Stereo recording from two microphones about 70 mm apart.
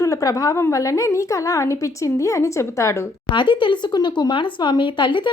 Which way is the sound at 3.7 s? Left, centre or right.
Left.